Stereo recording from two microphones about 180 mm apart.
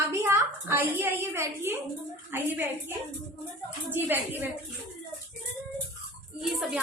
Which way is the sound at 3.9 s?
10° right (ahead or behind).